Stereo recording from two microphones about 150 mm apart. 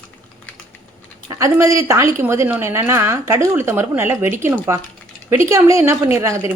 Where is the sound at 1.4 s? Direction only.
20° right (ahead or behind).